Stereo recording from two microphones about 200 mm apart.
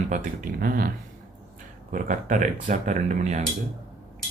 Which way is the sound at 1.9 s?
40° right (ahead or behind).